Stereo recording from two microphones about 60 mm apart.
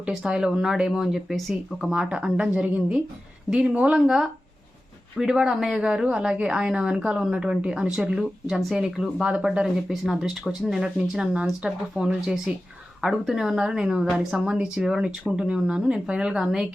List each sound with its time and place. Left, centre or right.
0.1 s speech: centre
1.9 s a woman's voice: centre
16.3 s speech: centre